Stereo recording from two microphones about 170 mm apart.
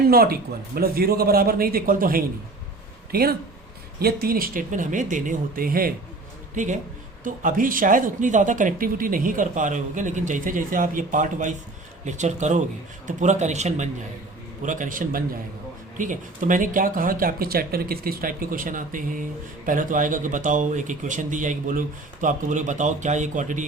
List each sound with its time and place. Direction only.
0.1 s speech: 60° right (ahead or behind)
6.6 s speech: 50° right (ahead or behind)